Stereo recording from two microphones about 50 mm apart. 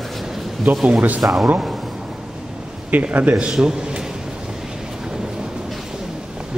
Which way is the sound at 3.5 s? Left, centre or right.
Centre.